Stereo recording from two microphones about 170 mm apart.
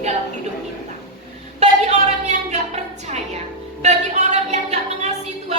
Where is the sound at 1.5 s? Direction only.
40° right (ahead or behind).